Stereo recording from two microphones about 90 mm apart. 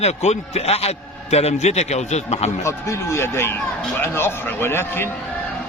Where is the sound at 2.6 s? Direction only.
30° left (ahead or behind).